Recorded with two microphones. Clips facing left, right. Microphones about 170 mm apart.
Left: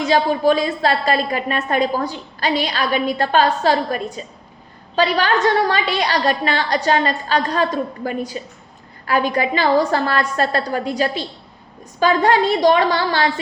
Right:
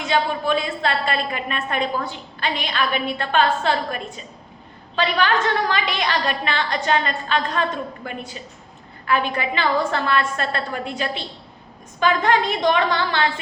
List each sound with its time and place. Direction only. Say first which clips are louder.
0.1 s a woman's voice: left 5 dB; 35° left (ahead or behind)